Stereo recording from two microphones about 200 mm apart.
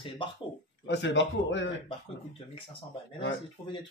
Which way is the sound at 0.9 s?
60° left (ahead or behind).